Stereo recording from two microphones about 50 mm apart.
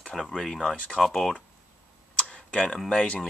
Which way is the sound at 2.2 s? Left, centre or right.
Centre.